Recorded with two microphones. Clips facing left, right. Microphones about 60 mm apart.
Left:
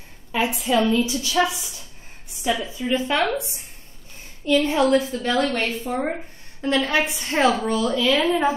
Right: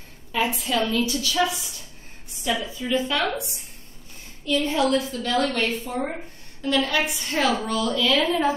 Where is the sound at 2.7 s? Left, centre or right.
Left.